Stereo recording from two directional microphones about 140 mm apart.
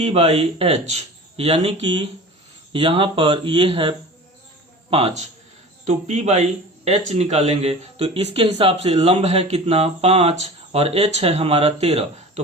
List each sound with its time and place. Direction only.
0.0 s speech: 45° right (ahead or behind)
5.8 s speech: 55° right (ahead or behind)